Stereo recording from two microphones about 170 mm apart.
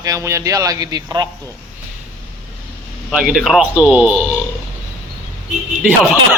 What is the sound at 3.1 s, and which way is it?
Speech, 5° right (ahead or behind).